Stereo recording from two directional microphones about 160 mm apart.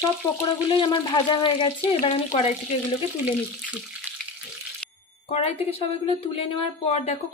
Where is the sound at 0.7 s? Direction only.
30° left (ahead or behind).